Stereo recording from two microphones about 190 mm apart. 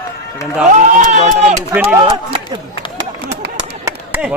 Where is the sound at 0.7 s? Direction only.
40° right (ahead or behind).